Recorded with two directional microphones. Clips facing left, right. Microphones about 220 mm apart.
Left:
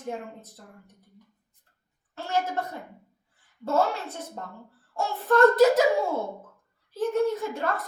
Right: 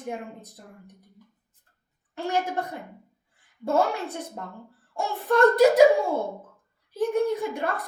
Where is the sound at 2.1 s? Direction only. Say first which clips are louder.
Right 2 dB; 15° right (ahead or behind).